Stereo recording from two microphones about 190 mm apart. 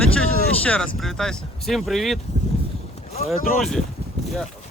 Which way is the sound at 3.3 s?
45° left (ahead or behind).